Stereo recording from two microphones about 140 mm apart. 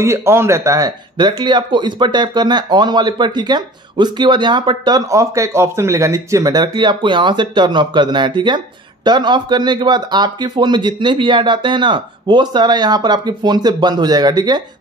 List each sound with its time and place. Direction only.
0.0 s speech: 20° right (ahead or behind)